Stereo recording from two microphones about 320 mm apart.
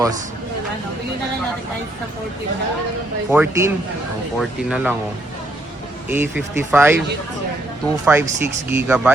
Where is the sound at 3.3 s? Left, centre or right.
Centre.